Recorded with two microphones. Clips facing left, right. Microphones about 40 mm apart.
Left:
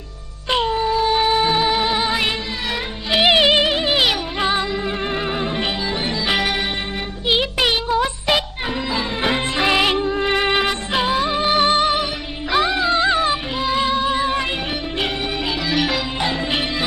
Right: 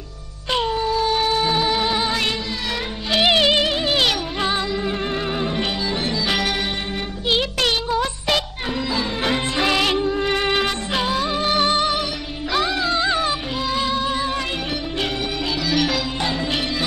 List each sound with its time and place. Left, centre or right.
0.5 s music: centre
7.2 s a sound: centre
8.9 s music: centre
15.7 s music: centre